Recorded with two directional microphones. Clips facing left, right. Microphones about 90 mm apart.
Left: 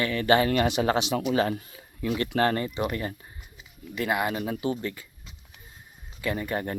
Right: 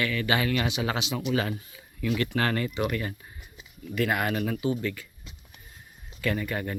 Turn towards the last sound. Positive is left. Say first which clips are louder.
# even
turn(degrees=30)  # may be behind; listen again after turning